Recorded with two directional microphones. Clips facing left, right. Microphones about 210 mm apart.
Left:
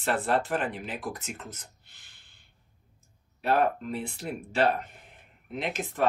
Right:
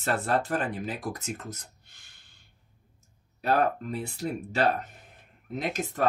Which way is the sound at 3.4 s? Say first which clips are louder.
Even; 40° right (ahead or behind).